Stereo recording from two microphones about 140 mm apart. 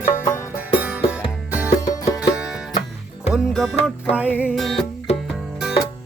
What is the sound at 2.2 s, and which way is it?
Music, 5° right (ahead or behind).